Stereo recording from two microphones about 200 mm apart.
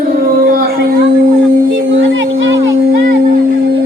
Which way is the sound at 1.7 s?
70° right (ahead or behind).